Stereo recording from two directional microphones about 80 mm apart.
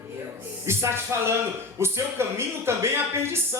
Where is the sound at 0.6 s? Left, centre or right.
Right.